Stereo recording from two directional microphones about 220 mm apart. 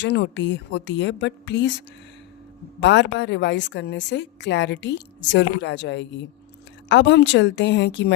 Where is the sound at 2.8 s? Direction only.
55° left (ahead or behind).